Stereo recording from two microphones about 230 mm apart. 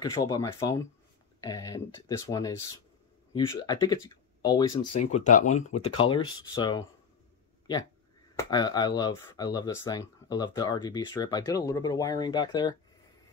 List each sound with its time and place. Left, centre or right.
0.0 s speech: centre
8.4 s speech: centre